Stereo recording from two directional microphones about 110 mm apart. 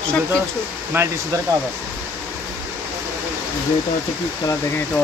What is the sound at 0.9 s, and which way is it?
Speech, 20° right (ahead or behind).